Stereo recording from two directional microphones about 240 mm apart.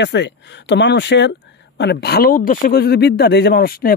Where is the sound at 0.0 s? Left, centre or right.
Left.